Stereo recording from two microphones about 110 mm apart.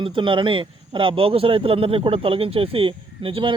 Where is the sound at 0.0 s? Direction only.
50° right (ahead or behind).